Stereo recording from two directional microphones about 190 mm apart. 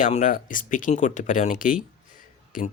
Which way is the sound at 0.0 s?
40° left (ahead or behind).